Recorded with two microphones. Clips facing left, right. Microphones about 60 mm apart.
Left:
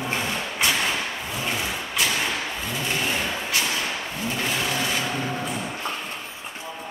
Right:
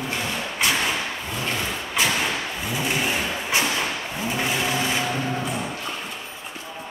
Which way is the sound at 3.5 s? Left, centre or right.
Right.